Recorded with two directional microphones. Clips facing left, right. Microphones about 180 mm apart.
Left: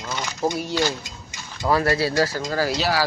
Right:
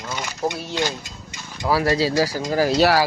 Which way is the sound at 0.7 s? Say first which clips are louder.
Left 1 dB; 20° right (ahead or behind).